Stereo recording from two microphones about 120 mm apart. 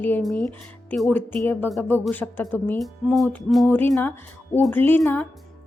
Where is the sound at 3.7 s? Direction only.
20° left (ahead or behind).